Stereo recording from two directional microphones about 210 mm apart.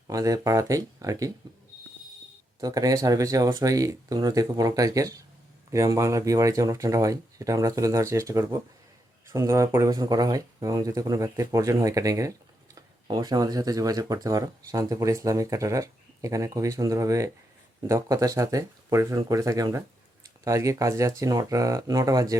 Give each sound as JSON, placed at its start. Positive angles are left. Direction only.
{"t": 0.1, "sound": "speech", "side_deg": -15}
{"t": 2.6, "sound": "speech", "side_deg": -15}